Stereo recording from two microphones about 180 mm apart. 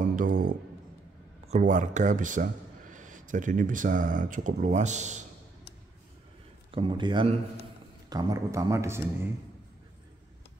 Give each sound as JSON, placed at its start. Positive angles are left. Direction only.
{"t": 0.1, "sound": "music", "side_deg": -50}
{"t": 1.5, "sound": "speech", "side_deg": -45}
{"t": 6.7, "sound": "a man's voice", "side_deg": -30}